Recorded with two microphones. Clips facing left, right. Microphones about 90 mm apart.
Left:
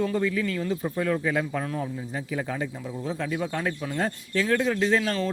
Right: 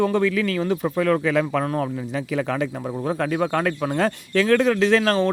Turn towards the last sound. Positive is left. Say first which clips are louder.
# right 6 dB
turn(degrees=-70)  # may be behind; listen again after turning